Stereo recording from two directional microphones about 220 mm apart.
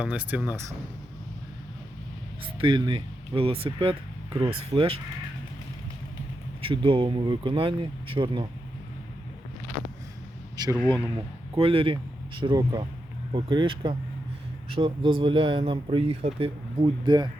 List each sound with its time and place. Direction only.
0.0 s speech: 5° right (ahead or behind)
2.6 s speech: 20° right (ahead or behind)
6.7 s speech: 25° right (ahead or behind)
10.8 s speech: 5° left (ahead or behind)
11.5 s speech: 25° right (ahead or behind)